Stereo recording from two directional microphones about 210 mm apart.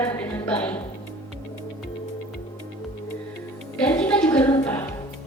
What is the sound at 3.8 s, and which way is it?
Music, 5° left (ahead or behind).